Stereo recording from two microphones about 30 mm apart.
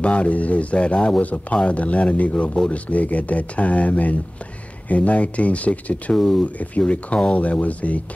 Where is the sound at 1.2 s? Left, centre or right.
Left.